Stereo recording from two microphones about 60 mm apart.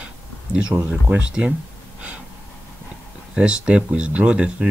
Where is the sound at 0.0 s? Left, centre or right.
Centre.